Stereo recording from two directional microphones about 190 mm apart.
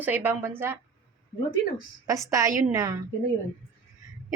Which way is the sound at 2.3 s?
15° right (ahead or behind).